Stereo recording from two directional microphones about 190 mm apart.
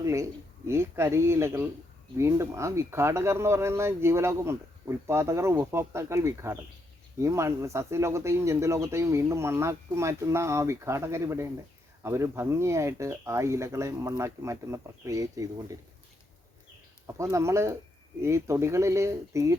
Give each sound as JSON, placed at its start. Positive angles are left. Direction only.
{"t": 0.0, "sound": "speech", "side_deg": -15}
{"t": 17.2, "sound": "speech", "side_deg": -15}